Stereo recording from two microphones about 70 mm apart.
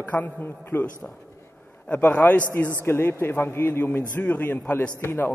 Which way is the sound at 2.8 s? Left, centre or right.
Left.